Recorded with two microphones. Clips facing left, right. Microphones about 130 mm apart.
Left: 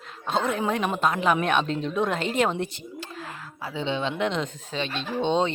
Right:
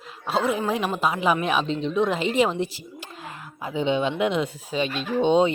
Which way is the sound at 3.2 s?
15° right (ahead or behind).